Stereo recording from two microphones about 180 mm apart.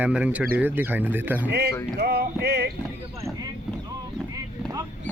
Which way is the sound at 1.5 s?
65° right (ahead or behind).